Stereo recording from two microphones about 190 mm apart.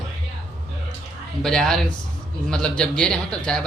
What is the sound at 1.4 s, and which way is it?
A man's voice, centre (ahead or behind).